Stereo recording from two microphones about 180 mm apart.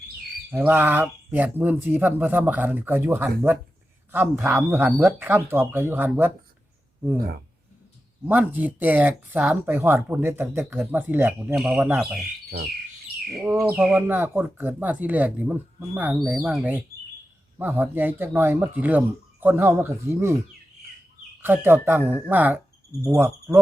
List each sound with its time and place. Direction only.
0.5 s speech: 10° right (ahead or behind)
8.2 s speech: 10° right (ahead or behind)
12.5 s speech: 60° right (ahead or behind)
13.4 s speech: 15° right (ahead or behind)
21.4 s speech: 10° right (ahead or behind)